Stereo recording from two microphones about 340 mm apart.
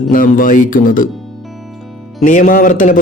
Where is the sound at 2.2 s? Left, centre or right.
Left.